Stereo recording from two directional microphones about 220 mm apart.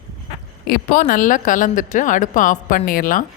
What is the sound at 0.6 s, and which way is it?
Speech, 40° left (ahead or behind).